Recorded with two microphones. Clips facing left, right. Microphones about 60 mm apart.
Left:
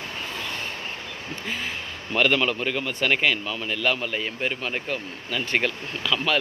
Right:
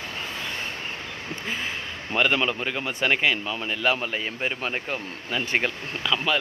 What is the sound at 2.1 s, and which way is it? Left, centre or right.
Speech, centre.